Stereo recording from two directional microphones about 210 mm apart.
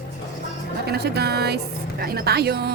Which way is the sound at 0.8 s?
50° right (ahead or behind).